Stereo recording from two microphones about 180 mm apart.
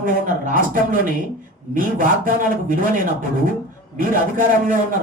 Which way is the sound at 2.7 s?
50° right (ahead or behind).